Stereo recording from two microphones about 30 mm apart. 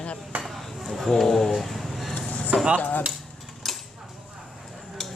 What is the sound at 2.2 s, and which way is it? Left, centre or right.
Chop, left.